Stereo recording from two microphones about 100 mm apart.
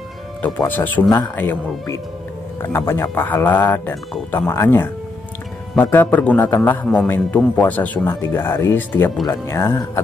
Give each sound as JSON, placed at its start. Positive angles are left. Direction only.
{"t": 0.7, "sound": "speech", "side_deg": 20}
{"t": 2.6, "sound": "speech", "side_deg": 25}